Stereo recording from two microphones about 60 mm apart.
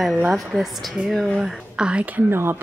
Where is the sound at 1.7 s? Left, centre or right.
Centre.